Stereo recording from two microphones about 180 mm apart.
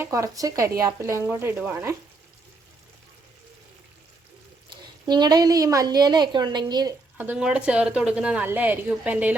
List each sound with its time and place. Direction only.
0.0 s a woman's voice: 15° right (ahead or behind)
4.7 s a woman's voice: 25° right (ahead or behind)
7.2 s a woman's voice: 5° right (ahead or behind)